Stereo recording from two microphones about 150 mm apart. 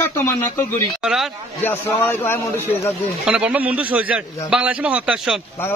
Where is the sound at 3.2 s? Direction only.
5° right (ahead or behind).